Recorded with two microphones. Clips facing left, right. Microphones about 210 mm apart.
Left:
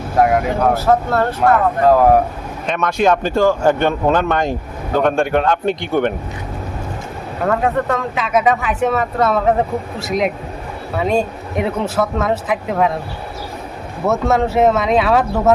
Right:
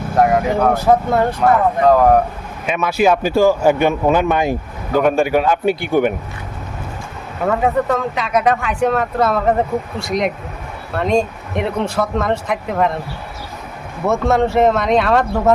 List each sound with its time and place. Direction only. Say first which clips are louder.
0.2 s speech: even; centre (ahead or behind)
0.7 s speech: even; 15° right (ahead or behind)
1.4 s speech: even; 5° left (ahead or behind)
2.6 s speech: right 1 dB; 5° right (ahead or behind)
7.4 s speech: right 1 dB; centre (ahead or behind)
14.0 s speech: right 1 dB; centre (ahead or behind)